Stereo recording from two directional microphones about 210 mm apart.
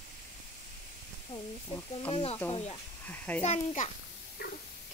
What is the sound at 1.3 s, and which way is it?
Speech, 25° left (ahead or behind).